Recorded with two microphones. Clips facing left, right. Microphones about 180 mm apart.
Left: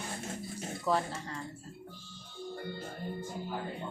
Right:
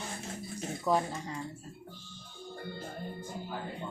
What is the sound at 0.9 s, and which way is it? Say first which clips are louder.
Speech: right 2 dB; 15° right (ahead or behind).